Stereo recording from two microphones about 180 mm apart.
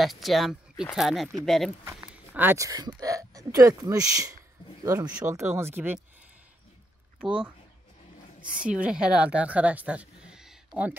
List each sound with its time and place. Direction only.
0.0 s speech: centre (ahead or behind)
2.0 s a sound: 10° right (ahead or behind)
2.9 s speech: 20° right (ahead or behind)
7.2 s speech: 5° right (ahead or behind)